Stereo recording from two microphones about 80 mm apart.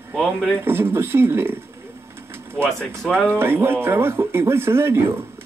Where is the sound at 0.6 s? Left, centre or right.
Right.